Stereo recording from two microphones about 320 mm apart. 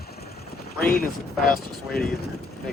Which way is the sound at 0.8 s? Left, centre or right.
Left.